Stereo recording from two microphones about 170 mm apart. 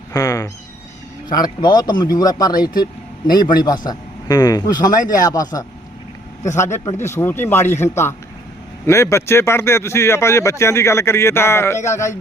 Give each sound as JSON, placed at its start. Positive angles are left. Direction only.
{"t": 0.1, "sound": "speech", "side_deg": 20}